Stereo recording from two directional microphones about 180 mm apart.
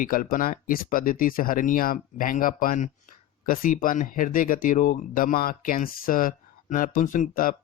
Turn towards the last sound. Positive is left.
turn(degrees=50)  # may be behind; listen again after turning